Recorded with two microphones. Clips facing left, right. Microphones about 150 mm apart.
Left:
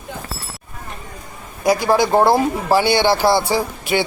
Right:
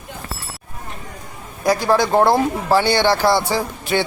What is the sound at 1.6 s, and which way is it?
Speech, 15° left (ahead or behind).